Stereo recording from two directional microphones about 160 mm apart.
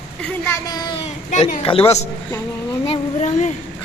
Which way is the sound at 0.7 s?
25° left (ahead or behind).